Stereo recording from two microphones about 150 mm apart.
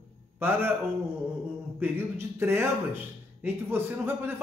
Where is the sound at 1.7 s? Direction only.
15° right (ahead or behind).